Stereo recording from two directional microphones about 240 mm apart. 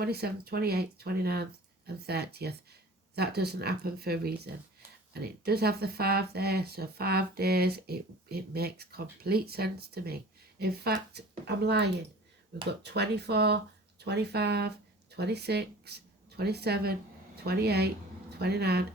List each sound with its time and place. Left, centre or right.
0.0 s speech: right